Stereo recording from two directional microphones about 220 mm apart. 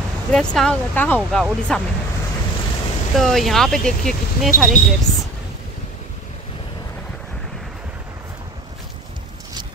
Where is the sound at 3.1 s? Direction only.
Centre (ahead or behind).